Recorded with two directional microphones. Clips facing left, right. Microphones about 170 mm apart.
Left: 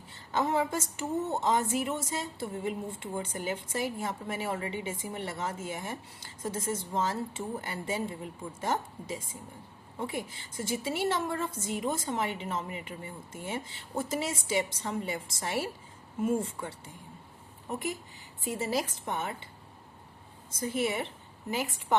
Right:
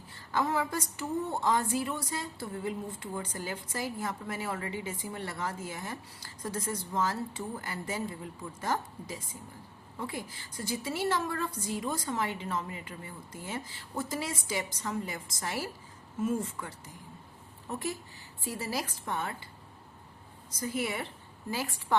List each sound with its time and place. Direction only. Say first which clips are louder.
0.1 s a woman's voice: left 1 dB; 25° left (ahead or behind)
17.7 s a woman's voice: left 1 dB; 20° left (ahead or behind)
20.6 s a woman's voice: left 3 dB; 25° left (ahead or behind)